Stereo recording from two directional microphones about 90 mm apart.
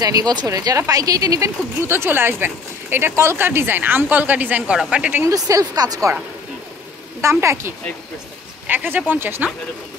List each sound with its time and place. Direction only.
0.0 s speech: 45° right (ahead or behind)
1.8 s speech: 30° right (ahead or behind); by 5.2 s 15° right (ahead or behind)
5.2 s a woman's voice: 40° right (ahead or behind)
7.2 s speech: 30° right (ahead or behind)